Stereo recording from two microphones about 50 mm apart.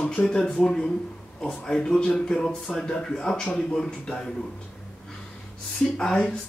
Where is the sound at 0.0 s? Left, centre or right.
Left.